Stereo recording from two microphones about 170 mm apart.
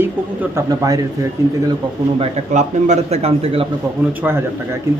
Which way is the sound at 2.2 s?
40° right (ahead or behind).